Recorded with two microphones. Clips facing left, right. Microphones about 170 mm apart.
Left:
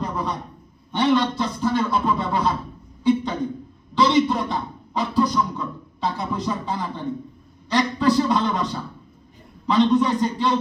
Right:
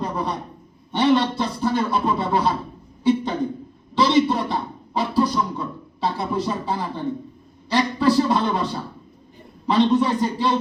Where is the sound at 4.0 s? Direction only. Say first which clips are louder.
Right 1 dB; 30° right (ahead or behind).